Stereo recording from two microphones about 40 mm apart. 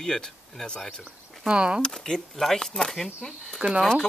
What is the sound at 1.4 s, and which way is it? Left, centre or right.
Speech, right.